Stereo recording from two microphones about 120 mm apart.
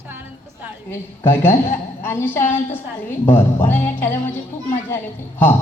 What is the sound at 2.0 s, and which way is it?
A woman's voice, 20° left (ahead or behind).